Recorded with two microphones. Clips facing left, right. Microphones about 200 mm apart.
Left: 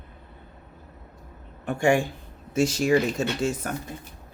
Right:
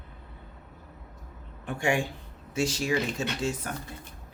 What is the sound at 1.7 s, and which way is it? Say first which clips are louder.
Speech: left 6 dB; 45° left (ahead or behind).